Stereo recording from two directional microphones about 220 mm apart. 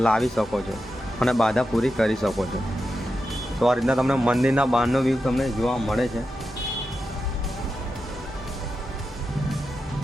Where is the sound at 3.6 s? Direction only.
Centre (ahead or behind).